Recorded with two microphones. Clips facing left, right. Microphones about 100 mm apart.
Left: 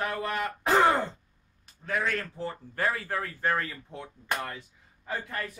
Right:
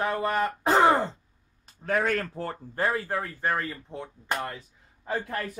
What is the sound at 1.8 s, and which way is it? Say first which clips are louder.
Speech: right 4 dB; 45° right (ahead or behind).